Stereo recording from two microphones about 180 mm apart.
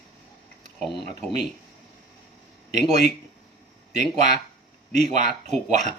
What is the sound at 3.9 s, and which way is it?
Speech, 40° right (ahead or behind).